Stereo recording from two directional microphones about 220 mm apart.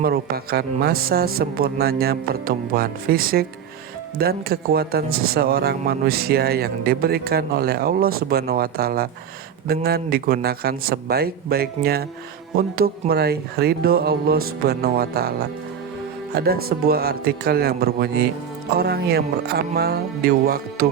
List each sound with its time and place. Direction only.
0.0 s speech: 45° right (ahead or behind)